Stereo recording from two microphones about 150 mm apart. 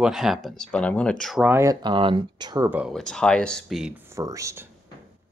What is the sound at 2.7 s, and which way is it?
Speech, 10° right (ahead or behind).